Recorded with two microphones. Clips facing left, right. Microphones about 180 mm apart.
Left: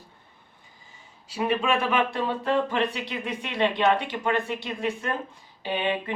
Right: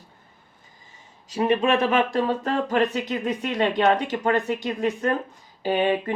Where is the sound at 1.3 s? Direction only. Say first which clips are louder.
Right 4 dB; 45° right (ahead or behind).